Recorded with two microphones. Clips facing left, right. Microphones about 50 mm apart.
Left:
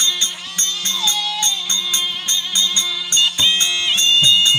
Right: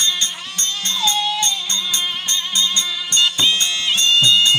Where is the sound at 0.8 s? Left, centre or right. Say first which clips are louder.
Right 3 dB; centre.